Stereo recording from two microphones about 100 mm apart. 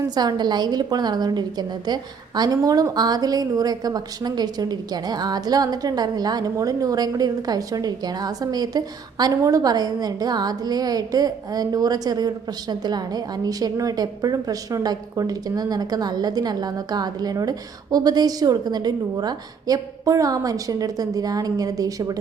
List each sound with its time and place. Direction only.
0.1 s a woman's voice: 45° right (ahead or behind)